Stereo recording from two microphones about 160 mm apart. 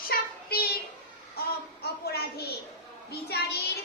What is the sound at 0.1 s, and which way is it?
Child singing, 70° left (ahead or behind).